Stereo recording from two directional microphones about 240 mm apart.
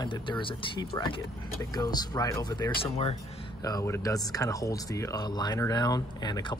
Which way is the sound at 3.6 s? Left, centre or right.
Centre.